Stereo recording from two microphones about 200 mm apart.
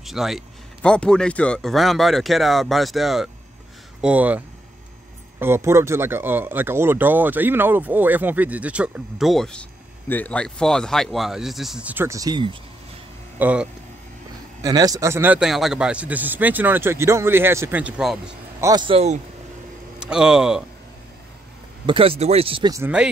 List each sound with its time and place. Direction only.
0.0 s speech: centre (ahead or behind)
5.4 s speech: 10° right (ahead or behind)
13.4 s speech: 5° right (ahead or behind)
14.6 s speech: 20° right (ahead or behind)
18.6 s speech: 20° right (ahead or behind)
20.0 s speech: 5° right (ahead or behind)
21.8 s speech: 25° right (ahead or behind)